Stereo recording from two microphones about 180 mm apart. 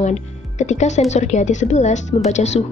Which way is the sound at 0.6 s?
40° left (ahead or behind).